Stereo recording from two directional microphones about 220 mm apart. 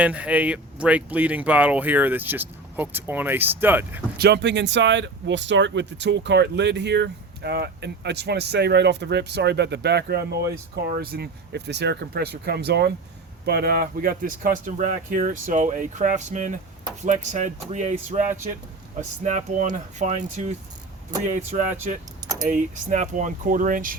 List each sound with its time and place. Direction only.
0.0 s speech: 5° right (ahead or behind)
4.2 s speech: 50° right (ahead or behind)